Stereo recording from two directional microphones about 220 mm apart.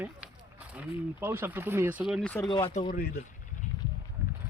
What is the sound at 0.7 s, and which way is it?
Speech, 10° right (ahead or behind).